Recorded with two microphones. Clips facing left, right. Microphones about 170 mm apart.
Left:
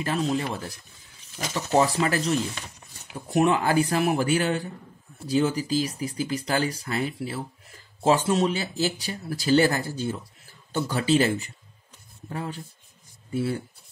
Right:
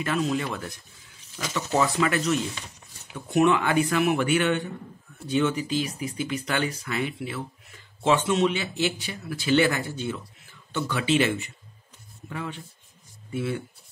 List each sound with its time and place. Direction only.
0.0 s speech: 30° left (ahead or behind)